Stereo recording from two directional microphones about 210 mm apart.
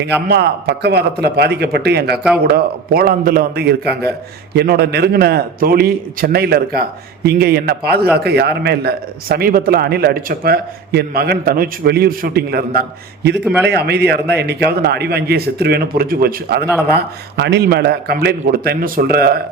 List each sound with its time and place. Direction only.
0.3 s a man's voice: 50° right (ahead or behind)
13.4 s a man's voice: 5° right (ahead or behind)
13.7 s a man's voice: 50° right (ahead or behind)